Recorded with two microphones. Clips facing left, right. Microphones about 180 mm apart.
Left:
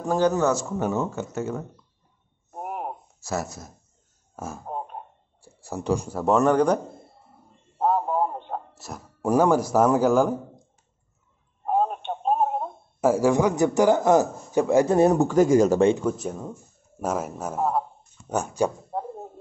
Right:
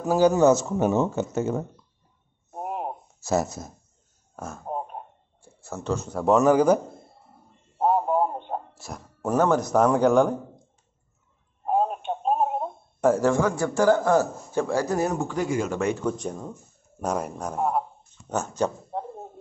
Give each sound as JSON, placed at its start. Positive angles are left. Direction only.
{"t": 0.0, "sound": "speech", "side_deg": -10}
{"t": 2.6, "sound": "a sound", "side_deg": -25}
{"t": 4.4, "sound": "speech", "side_deg": 5}
{"t": 5.7, "sound": "speech", "side_deg": 15}
{"t": 6.1, "sound": "speech", "side_deg": 0}
{"t": 7.8, "sound": "a sound", "side_deg": -5}
{"t": 8.7, "sound": "speech", "side_deg": 0}
{"t": 11.6, "sound": "telephone", "side_deg": 0}
{"t": 13.1, "sound": "speech", "side_deg": 15}
{"t": 15.1, "sound": "speech", "side_deg": 45}
{"t": 16.0, "sound": "a man's voice", "side_deg": 5}